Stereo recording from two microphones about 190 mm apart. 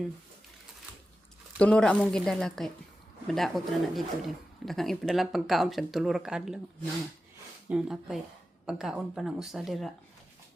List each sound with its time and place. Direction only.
1.5 s speech: 5° left (ahead or behind)
7.7 s speech: 5° right (ahead or behind)